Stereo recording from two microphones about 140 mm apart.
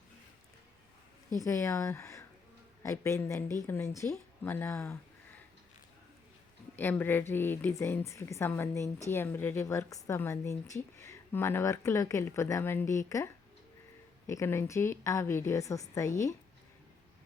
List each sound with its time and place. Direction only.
1.4 s a woman's voice: 20° left (ahead or behind)
6.7 s a woman's voice: 15° left (ahead or behind)